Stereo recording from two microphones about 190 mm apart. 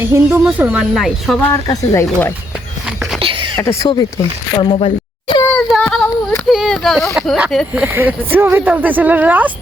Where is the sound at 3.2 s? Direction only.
30° right (ahead or behind).